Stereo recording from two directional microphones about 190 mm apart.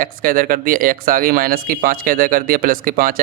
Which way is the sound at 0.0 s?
50° right (ahead or behind).